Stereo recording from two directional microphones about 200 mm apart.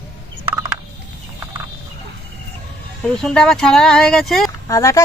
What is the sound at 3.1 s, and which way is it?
Speech, 5° left (ahead or behind).